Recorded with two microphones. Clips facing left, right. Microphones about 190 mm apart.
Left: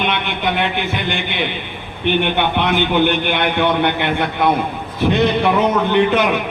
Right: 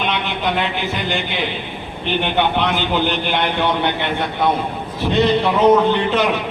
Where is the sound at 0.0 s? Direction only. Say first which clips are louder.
Left 1 dB; 60° left (ahead or behind).